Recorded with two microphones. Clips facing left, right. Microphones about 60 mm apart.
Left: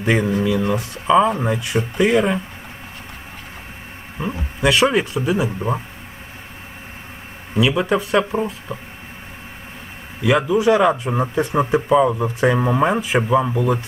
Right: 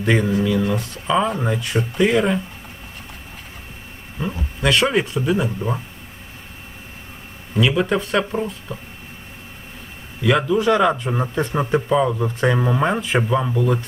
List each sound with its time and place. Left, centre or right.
0.0 s speech: centre
4.2 s speech: left
4.6 s speech: centre
7.5 s speech: centre
10.2 s speech: centre